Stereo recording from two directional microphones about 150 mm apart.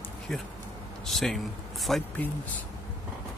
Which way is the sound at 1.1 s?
Centre (ahead or behind).